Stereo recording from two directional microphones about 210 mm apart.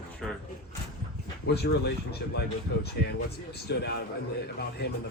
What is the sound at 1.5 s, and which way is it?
Speech, 50° left (ahead or behind).